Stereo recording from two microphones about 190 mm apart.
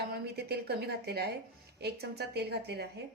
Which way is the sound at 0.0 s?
55° right (ahead or behind).